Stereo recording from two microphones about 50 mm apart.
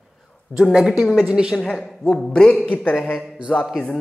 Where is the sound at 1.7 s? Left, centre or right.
Centre.